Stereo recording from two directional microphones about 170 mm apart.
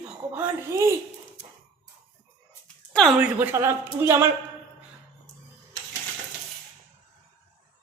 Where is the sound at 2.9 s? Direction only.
Centre (ahead or behind).